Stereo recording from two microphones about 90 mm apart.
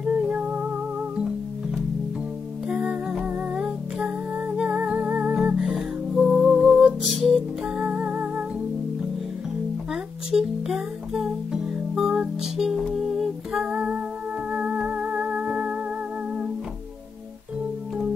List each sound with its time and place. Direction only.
0.0 s music: 15° right (ahead or behind)
2.7 s music: 10° right (ahead or behind)
10.3 s music: 10° right (ahead or behind)